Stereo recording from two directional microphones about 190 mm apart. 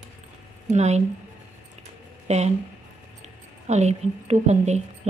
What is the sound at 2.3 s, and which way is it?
A woman's voice, 35° right (ahead or behind).